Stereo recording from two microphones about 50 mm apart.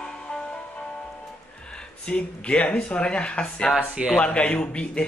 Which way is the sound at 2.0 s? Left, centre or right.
Left.